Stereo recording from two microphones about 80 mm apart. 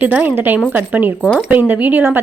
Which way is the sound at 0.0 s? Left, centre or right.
Right.